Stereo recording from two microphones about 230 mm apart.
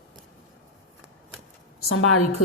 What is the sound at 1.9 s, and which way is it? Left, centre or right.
Speech, left.